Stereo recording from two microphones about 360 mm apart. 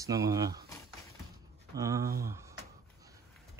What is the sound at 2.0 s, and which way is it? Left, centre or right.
Speech, right.